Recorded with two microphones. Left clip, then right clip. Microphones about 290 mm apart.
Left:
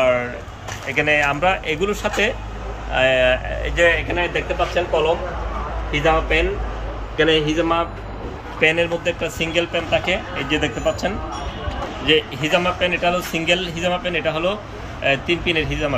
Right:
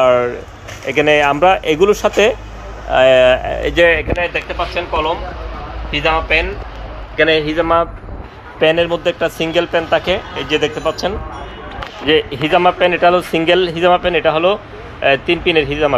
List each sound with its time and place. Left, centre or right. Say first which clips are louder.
0.0 s a sound: right 6 dB; centre
0.8 s a man's voice: right 6 dB; right
5.9 s a man's voice: right 3 dB; centre